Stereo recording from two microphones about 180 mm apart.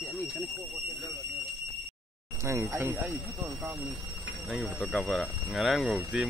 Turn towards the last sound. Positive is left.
turn(degrees=0)  # may be behind; listen again after turning